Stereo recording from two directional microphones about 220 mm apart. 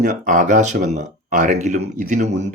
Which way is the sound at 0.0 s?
35° right (ahead or behind).